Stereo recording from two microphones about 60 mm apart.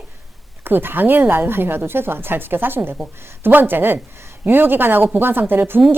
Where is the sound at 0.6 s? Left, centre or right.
Right.